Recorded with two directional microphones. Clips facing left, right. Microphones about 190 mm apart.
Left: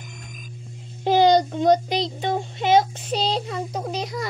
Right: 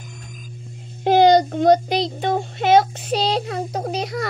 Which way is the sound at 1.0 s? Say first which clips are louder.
Right 3 dB; 55° right (ahead or behind).